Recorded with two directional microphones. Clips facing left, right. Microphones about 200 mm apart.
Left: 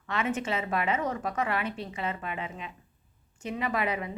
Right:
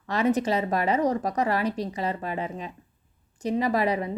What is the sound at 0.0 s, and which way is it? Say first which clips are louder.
A woman's voice: right 7 dB; 35° right (ahead or behind).